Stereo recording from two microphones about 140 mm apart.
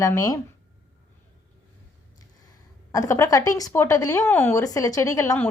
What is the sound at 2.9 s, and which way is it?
A woman's voice, 25° left (ahead or behind).